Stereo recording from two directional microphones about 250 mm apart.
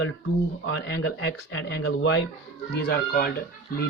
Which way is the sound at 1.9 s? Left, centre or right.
Left.